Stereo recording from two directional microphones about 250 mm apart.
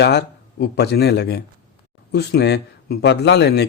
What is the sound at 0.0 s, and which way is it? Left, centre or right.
Speech, left.